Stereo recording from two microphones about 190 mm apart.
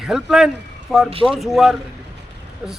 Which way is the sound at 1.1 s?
30° right (ahead or behind).